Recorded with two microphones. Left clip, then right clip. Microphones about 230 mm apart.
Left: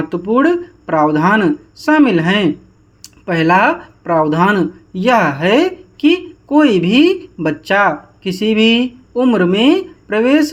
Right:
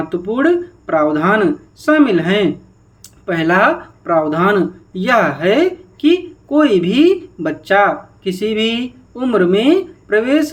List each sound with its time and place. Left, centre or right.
0.3 s speech: left